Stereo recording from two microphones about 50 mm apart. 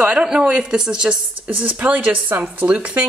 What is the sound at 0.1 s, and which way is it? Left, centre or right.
Speech, centre.